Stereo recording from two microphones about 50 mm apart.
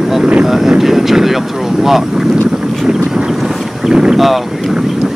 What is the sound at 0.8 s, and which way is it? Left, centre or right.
Speech, centre.